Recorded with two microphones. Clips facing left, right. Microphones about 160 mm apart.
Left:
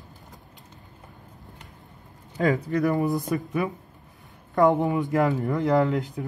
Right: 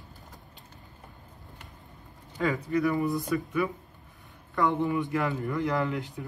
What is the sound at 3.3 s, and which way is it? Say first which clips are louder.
A man's voice: left 2 dB; 45° left (ahead or behind).